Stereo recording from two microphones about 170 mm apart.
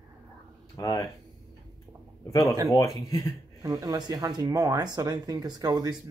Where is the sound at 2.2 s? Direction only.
20° left (ahead or behind).